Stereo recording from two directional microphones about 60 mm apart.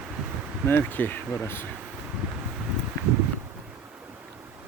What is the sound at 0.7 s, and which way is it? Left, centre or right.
Speech, left.